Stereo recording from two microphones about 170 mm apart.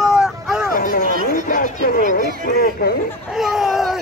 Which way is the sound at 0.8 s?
55° left (ahead or behind).